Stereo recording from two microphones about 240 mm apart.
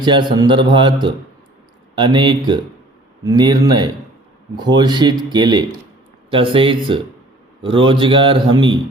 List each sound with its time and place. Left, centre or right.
0.0 s a man's voice: centre